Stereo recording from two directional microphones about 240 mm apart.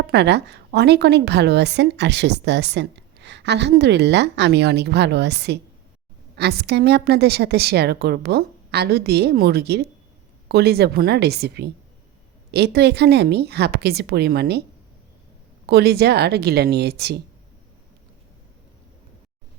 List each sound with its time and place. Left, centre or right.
0.0 s a woman's voice: right
15.6 s a woman's voice: right